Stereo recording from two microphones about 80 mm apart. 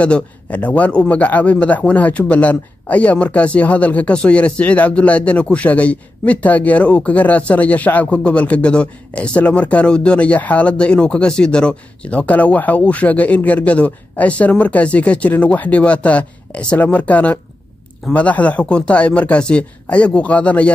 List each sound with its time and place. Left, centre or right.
0.0 s a man's voice: centre